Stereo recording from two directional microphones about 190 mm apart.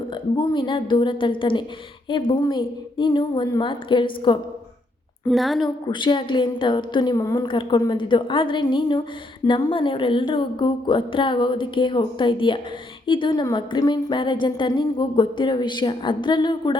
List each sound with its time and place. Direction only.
0.1 s a woman's voice: 25° left (ahead or behind)
5.3 s a woman's voice: centre (ahead or behind)
5.9 s a woman's voice: 25° left (ahead or behind)